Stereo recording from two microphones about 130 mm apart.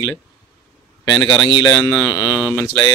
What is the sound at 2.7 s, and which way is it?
Speech, 35° left (ahead or behind).